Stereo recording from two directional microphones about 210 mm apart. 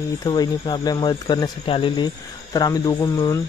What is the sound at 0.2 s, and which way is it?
Speech, 20° left (ahead or behind).